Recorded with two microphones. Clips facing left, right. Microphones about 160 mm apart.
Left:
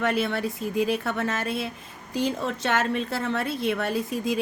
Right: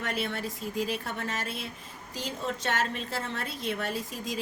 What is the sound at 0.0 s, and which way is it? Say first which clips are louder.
A woman's voice: left 7 dB; 70° left (ahead or behind).